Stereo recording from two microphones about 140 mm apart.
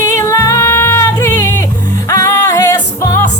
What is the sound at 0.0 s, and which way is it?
Music, 20° left (ahead or behind).